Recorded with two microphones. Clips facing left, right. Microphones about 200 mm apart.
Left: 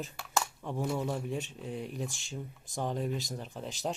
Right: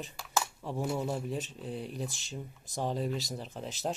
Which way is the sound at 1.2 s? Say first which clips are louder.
Even; 40° right (ahead or behind).